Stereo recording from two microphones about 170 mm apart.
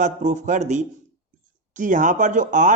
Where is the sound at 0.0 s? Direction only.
45° right (ahead or behind).